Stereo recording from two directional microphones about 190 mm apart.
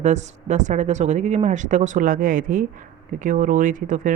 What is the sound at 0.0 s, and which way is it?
Speech, 40° right (ahead or behind).